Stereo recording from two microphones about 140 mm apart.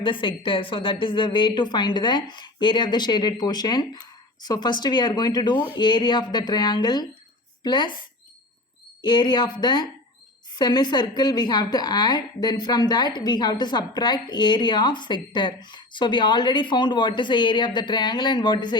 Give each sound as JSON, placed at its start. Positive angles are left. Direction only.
{"t": 0.0, "sound": "a woman's voice", "side_deg": 35}
{"t": 9.0, "sound": "a woman's voice", "side_deg": 30}